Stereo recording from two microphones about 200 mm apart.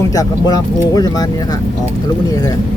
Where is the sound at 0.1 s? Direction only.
20° left (ahead or behind).